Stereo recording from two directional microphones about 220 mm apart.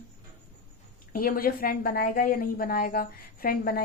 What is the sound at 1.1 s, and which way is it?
A woman's voice, 40° left (ahead or behind).